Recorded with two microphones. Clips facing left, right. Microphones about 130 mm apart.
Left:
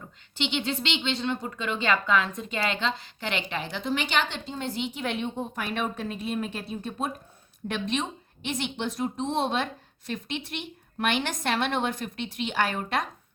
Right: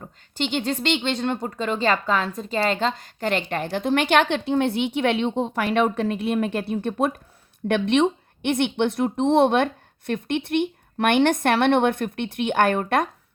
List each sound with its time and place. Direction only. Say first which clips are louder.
0.0 s a woman's voice: right 4 dB; 45° right (ahead or behind)